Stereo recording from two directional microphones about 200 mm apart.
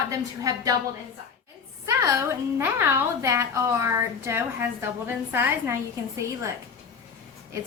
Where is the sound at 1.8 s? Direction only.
15° right (ahead or behind).